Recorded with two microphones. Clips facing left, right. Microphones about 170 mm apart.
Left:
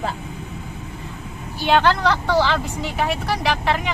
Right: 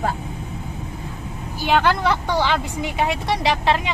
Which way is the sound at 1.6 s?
15° right (ahead or behind).